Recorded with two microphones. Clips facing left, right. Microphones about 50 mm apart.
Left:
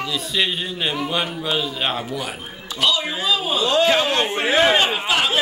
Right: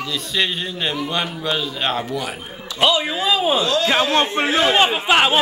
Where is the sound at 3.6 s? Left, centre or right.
Left.